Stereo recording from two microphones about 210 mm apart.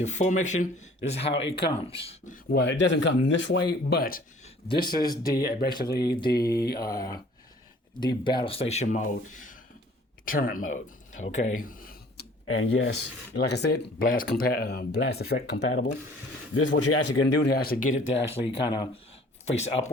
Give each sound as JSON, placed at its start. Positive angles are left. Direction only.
{"t": 0.0, "sound": "speech", "side_deg": 35}
{"t": 2.3, "sound": "speech", "side_deg": 50}
{"t": 4.9, "sound": "speech", "side_deg": 20}
{"t": 5.1, "sound": "speech", "side_deg": 45}
{"t": 6.0, "sound": "speech", "side_deg": 20}
{"t": 12.5, "sound": "speech", "side_deg": 70}
{"t": 13.3, "sound": "speech", "side_deg": 55}
{"t": 16.6, "sound": "speech", "side_deg": 80}
{"t": 18.3, "sound": "speech", "side_deg": 25}
{"t": 19.5, "sound": "speech", "side_deg": 30}